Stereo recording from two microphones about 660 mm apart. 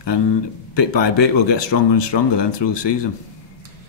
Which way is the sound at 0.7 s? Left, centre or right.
Left.